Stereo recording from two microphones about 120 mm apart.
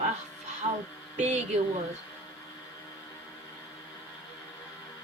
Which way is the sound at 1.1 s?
75° right (ahead or behind).